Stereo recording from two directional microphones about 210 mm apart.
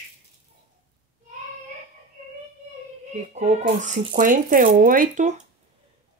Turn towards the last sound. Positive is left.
turn(degrees=-35)  # may be behind; listen again after turning